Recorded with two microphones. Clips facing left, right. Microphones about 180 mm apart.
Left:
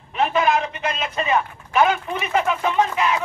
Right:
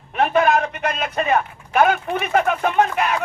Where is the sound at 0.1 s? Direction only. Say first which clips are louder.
Right 2 dB; 55° right (ahead or behind).